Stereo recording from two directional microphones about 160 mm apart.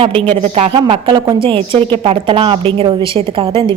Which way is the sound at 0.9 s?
30° right (ahead or behind).